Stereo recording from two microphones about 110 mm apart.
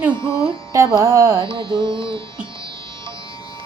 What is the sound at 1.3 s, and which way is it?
Music, 50° right (ahead or behind).